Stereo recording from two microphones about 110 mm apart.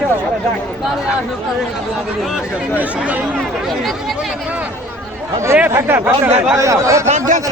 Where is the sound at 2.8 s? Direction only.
15° right (ahead or behind).